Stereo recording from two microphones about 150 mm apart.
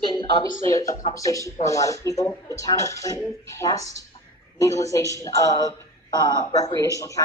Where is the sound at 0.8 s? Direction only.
20° left (ahead or behind).